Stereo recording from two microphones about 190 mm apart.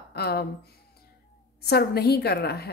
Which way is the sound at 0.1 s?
55° left (ahead or behind).